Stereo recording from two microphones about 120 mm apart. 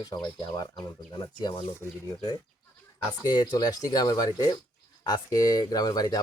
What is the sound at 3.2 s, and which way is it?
Speech, 35° left (ahead or behind).